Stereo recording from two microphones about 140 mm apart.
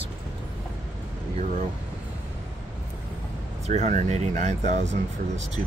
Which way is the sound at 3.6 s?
60° right (ahead or behind).